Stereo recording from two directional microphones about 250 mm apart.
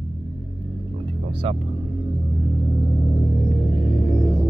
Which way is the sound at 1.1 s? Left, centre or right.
Right.